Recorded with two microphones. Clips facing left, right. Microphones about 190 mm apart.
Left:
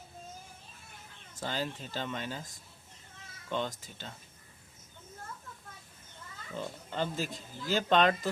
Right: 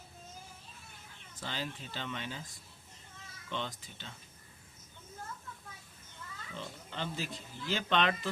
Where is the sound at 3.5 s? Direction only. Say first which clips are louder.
Left 5 dB; 45° left (ahead or behind).